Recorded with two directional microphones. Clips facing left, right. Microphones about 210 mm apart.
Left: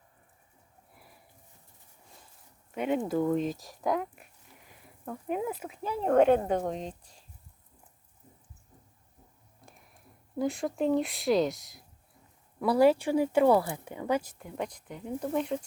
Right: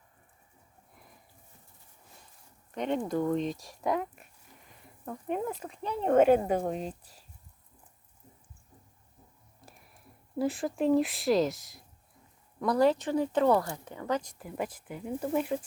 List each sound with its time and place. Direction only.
2.7 s speech: 5° left (ahead or behind)
9.6 s a sound: centre (ahead or behind)
10.3 s speech: centre (ahead or behind)